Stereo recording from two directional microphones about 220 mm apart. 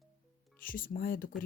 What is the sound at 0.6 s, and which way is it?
Music, 40° left (ahead or behind).